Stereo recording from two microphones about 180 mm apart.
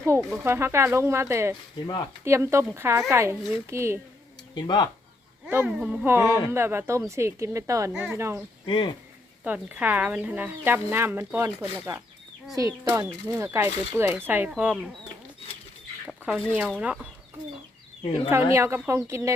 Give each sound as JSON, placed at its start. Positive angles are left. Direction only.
{"t": 0.0, "sound": "speech", "side_deg": -15}
{"t": 4.5, "sound": "speech", "side_deg": 25}
{"t": 5.5, "sound": "speech", "side_deg": -10}
{"t": 8.6, "sound": "speech", "side_deg": 25}
{"t": 9.4, "sound": "speech", "side_deg": -10}
{"t": 16.0, "sound": "chicken", "side_deg": -5}
{"t": 16.5, "sound": "speech", "side_deg": -5}
{"t": 18.5, "sound": "speech", "side_deg": -15}